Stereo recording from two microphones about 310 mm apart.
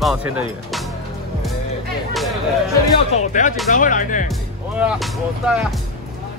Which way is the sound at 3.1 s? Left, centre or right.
Left.